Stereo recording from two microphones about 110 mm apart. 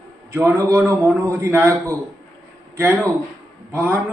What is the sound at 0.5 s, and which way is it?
A man's voice, 20° right (ahead or behind).